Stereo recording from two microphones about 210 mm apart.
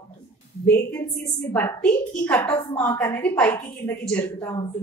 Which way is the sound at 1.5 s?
5° left (ahead or behind).